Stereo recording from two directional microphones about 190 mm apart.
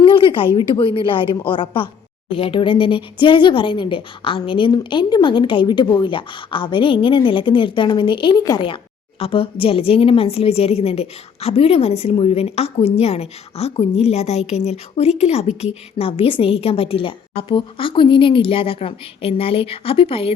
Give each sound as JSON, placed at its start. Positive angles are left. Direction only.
{"t": 0.0, "sound": "speech", "side_deg": 25}